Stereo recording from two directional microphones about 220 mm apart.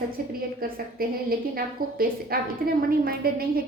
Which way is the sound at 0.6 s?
40° right (ahead or behind).